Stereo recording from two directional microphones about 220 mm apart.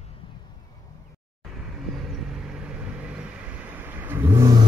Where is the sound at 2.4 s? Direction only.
5° right (ahead or behind).